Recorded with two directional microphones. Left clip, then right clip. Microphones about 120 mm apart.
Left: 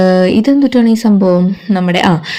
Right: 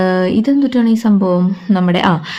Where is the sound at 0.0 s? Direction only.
25° left (ahead or behind).